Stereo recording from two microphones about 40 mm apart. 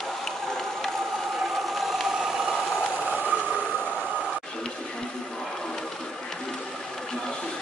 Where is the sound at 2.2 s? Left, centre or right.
Centre.